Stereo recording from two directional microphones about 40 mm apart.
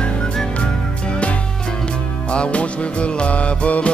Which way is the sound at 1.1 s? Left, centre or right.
Left.